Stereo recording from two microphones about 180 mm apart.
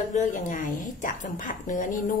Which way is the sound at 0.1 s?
45° left (ahead or behind).